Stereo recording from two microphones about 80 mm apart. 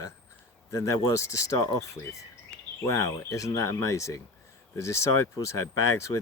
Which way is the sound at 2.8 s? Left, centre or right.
Left.